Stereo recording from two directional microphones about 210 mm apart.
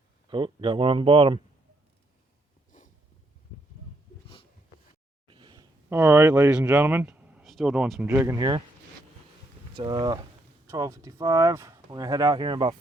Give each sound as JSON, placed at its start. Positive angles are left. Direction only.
{"t": 0.3, "sound": "speech", "side_deg": -25}
{"t": 5.3, "sound": "a sound", "side_deg": -20}
{"t": 5.9, "sound": "speech", "side_deg": -10}
{"t": 9.7, "sound": "speech", "side_deg": -20}